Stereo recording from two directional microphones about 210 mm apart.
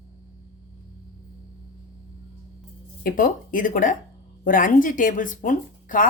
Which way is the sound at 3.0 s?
40° left (ahead or behind).